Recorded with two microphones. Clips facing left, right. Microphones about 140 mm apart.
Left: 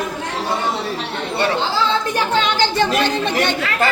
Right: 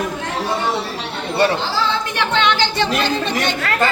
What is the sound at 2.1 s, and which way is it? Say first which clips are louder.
Speech: even; 40° left (ahead or behind).